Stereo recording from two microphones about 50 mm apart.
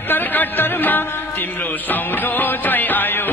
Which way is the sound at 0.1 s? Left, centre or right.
Left.